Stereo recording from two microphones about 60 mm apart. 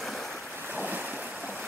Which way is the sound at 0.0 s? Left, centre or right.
Centre.